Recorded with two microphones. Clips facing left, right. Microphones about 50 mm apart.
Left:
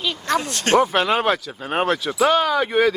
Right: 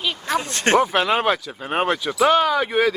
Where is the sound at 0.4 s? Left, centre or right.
Right.